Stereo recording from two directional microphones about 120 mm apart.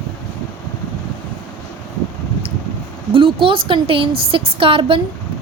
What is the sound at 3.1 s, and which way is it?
A woman's voice, 45° right (ahead or behind).